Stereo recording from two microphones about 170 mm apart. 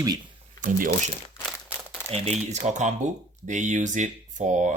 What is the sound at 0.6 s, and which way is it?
Speech, 50° right (ahead or behind).